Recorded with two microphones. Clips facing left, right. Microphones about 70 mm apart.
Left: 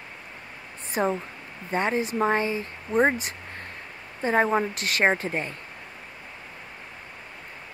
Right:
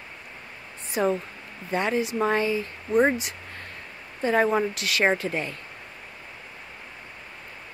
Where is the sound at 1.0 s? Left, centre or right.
Left.